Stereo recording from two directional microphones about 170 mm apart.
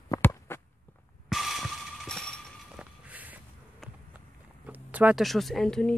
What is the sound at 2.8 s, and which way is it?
Vehicle, 10° right (ahead or behind).